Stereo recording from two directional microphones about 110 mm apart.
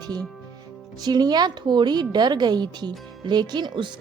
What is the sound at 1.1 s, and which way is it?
A woman's voice, 40° right (ahead or behind).